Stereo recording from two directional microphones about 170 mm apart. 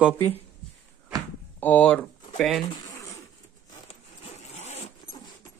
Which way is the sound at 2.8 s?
20° left (ahead or behind).